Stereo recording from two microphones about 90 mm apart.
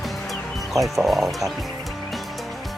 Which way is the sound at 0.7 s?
Centre (ahead or behind).